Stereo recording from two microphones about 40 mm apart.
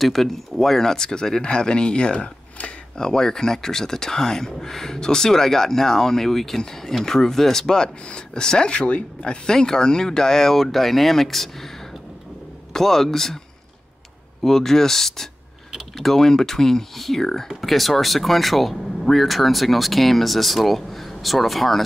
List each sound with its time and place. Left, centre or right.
0.0 s speech: centre
8.7 s speech: left
9.2 s speech: centre
12.7 s speech: centre
14.4 s speech: centre